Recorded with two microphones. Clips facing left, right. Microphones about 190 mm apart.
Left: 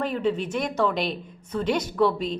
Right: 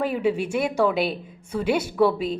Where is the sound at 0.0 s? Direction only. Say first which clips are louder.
Right 2 dB; 10° right (ahead or behind).